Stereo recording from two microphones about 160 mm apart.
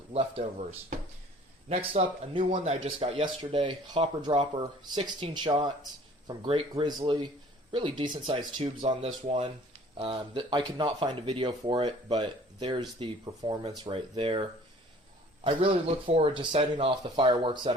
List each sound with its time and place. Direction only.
0.1 s speech: 40° right (ahead or behind)
15.4 s speech: 35° right (ahead or behind)